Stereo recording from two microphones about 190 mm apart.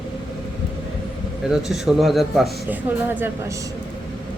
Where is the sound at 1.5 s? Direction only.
Centre (ahead or behind).